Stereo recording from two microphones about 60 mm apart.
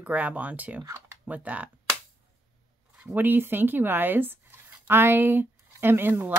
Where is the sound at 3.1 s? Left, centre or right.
Right.